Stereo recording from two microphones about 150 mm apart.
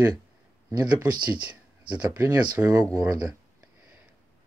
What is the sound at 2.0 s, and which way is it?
Speech, 20° right (ahead or behind).